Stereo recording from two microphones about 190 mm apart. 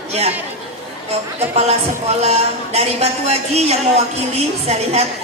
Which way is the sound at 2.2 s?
35° right (ahead or behind).